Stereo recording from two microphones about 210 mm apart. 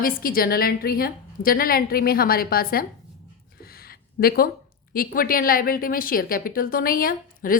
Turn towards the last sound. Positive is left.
turn(degrees=45)  # may be behind; listen again after turning